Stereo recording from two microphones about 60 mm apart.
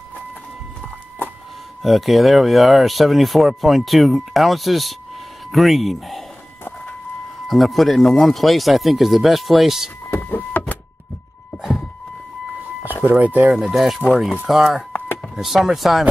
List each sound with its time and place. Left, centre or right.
1.8 s speech: centre
7.4 s speech: centre
10.2 s power windows: left
13.0 s speech: right
13.5 s speech: centre